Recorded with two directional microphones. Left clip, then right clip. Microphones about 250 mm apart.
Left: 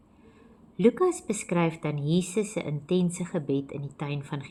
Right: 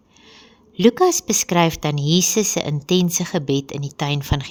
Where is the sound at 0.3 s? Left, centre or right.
Right.